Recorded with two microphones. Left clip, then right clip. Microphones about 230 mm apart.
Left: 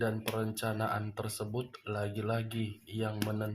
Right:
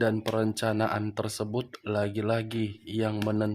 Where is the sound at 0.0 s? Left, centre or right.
Right.